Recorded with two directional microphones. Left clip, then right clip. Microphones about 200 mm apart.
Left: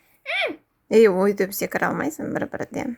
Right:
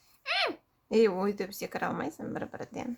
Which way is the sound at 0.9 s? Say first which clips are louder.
Left 10 dB; 30° left (ahead or behind).